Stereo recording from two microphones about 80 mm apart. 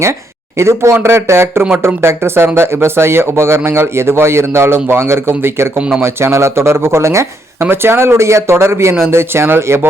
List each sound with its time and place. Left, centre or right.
0.0 s speech: right